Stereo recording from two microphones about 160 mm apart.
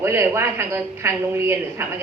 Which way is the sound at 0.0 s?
15° right (ahead or behind).